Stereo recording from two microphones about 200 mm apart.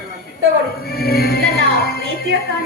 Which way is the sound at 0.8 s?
50° left (ahead or behind).